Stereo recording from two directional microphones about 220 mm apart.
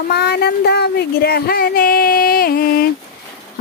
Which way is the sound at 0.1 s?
45° left (ahead or behind).